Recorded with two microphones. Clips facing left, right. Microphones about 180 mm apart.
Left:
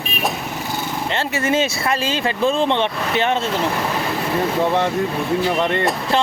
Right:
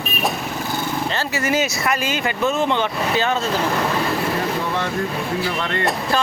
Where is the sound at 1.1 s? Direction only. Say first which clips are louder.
Left 4 dB; 25° left (ahead or behind).